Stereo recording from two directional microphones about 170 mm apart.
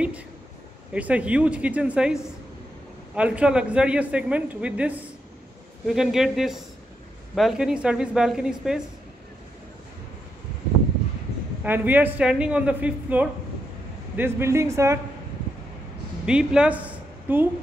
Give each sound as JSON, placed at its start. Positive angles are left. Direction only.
{"t": 0.9, "sound": "a woman's voice", "side_deg": -10}
{"t": 11.6, "sound": "a woman's voice", "side_deg": -10}
{"t": 16.3, "sound": "a woman's voice", "side_deg": -5}